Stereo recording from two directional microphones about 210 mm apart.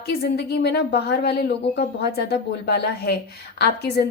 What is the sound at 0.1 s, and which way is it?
A woman's voice, 50° left (ahead or behind).